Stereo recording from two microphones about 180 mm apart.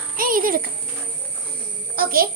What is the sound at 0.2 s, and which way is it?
Speech, 50° right (ahead or behind).